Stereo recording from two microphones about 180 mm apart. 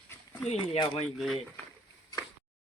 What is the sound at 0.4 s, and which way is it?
Speech, 35° left (ahead or behind).